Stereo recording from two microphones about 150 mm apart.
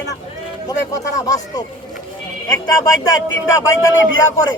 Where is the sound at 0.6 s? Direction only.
25° left (ahead or behind).